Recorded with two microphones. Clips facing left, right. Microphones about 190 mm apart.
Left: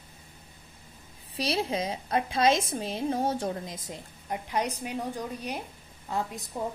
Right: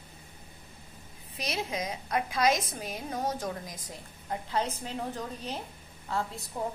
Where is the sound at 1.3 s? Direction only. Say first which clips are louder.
Left 5 dB; 30° left (ahead or behind); by 5.6 s 10° left (ahead or behind).